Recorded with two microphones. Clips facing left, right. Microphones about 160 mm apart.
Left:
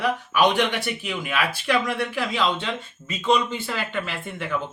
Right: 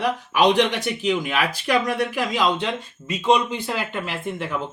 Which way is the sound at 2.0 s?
15° right (ahead or behind).